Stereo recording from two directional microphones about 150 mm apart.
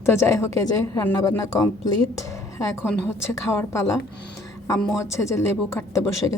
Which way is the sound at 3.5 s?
20° left (ahead or behind).